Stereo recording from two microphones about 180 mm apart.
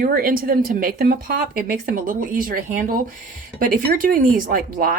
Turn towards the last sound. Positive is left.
turn(degrees=-55)  # may be behind; listen again after turning